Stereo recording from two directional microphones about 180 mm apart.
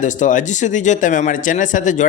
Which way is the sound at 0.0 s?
45° left (ahead or behind).